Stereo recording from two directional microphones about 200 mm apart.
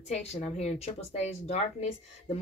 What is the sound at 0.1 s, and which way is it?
Speech, 30° left (ahead or behind).